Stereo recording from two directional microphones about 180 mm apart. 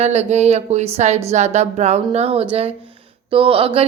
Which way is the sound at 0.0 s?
35° right (ahead or behind).